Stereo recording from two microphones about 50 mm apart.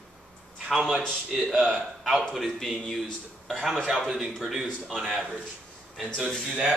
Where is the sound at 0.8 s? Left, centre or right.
Centre.